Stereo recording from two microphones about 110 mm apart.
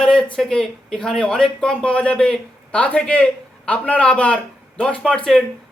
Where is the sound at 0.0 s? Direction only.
5° left (ahead or behind).